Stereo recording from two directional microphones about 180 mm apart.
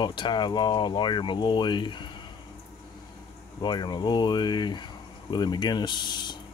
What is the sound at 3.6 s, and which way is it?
Speech, 25° left (ahead or behind).